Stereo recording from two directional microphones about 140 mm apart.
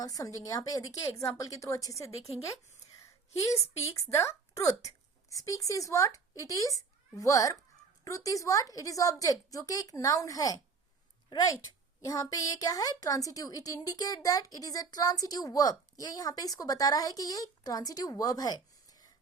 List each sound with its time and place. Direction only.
0.0 s a woman's voice: 25° left (ahead or behind)